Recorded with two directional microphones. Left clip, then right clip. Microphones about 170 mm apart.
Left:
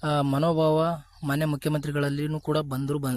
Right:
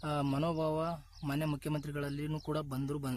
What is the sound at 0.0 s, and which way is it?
Speech, 40° left (ahead or behind).